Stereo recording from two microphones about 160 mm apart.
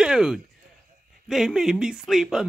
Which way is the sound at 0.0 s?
5° right (ahead or behind).